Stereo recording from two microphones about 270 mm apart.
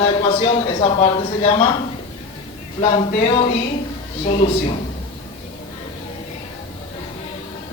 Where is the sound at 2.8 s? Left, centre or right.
Centre.